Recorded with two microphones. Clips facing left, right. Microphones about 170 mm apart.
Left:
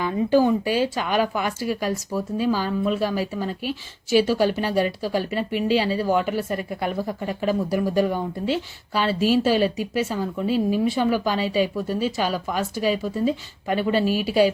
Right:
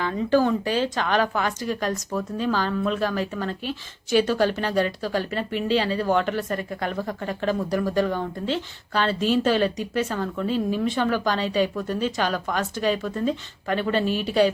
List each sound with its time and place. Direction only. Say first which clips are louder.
0.0 s speech: left 2 dB; 15° left (ahead or behind)